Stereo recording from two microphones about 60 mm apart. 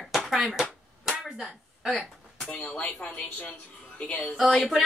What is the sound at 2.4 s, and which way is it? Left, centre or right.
Speech, left.